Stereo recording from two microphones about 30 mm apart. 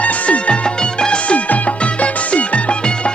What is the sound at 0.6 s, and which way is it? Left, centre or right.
Music, left.